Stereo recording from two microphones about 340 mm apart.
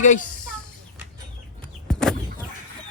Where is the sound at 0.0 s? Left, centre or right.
Left.